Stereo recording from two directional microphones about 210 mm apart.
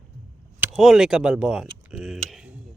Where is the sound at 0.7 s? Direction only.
Centre (ahead or behind).